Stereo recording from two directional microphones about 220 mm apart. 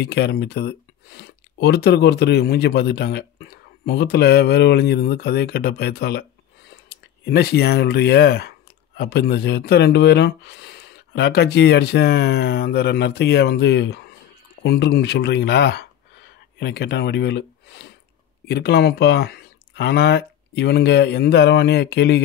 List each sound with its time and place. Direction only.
0.0 s speech: 45° left (ahead or behind)